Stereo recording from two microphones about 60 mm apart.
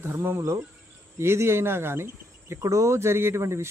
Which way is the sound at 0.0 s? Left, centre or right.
Right.